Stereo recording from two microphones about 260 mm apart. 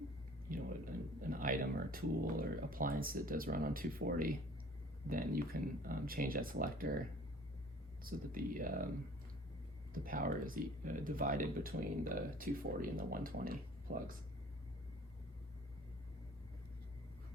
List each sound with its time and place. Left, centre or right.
0.5 s a sound: right
1.2 s speech: right
8.0 s speech: right
9.9 s speech: right